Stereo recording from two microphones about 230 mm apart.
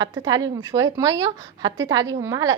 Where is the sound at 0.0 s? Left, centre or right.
Centre.